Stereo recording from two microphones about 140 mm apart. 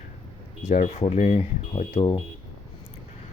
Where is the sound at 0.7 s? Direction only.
60° left (ahead or behind).